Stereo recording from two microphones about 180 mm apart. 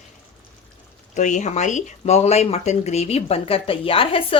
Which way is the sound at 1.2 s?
45° left (ahead or behind).